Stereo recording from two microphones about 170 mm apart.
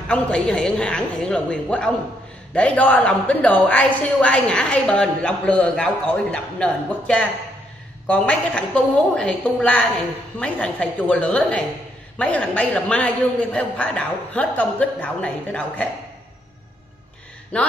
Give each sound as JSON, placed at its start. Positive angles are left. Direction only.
{"t": 0.1, "sound": "a woman's voice", "side_deg": 5}
{"t": 17.5, "sound": "a woman's voice", "side_deg": 10}